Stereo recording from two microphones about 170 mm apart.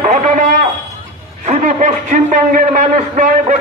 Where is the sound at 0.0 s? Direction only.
50° right (ahead or behind).